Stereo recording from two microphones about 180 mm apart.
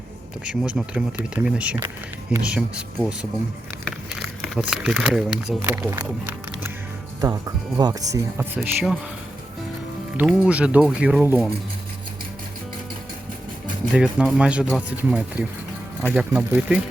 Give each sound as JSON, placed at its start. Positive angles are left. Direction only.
{"t": 0.4, "sound": "speech", "side_deg": -5}
{"t": 8.1, "sound": "speech", "side_deg": -10}
{"t": 10.2, "sound": "speech", "side_deg": -5}
{"t": 13.9, "sound": "speech", "side_deg": -5}